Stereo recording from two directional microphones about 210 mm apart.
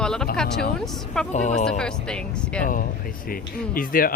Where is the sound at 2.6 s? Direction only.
40° left (ahead or behind).